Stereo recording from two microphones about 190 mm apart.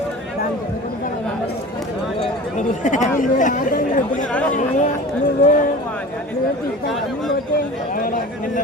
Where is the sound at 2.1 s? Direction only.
40° left (ahead or behind).